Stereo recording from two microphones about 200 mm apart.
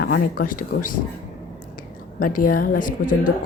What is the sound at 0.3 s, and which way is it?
Speech, 45° left (ahead or behind).